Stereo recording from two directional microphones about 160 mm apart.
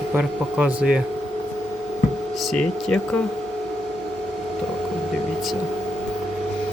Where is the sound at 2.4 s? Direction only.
5° left (ahead or behind).